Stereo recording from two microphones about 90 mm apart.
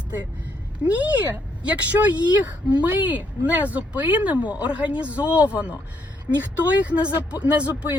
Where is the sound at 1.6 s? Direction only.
15° right (ahead or behind).